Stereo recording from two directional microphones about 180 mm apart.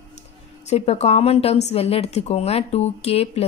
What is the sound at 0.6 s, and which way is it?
A woman's voice, 35° left (ahead or behind).